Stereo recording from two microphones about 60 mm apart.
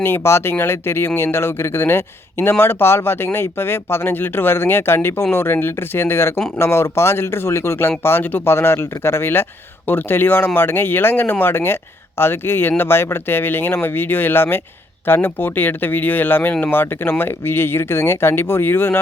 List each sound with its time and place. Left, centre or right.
0.0 s speech: left